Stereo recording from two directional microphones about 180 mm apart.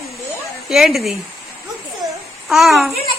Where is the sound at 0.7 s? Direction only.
Centre (ahead or behind).